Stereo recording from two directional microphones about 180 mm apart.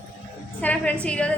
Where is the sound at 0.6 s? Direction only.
10° left (ahead or behind).